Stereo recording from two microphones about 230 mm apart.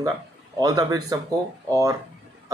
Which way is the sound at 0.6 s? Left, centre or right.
Centre.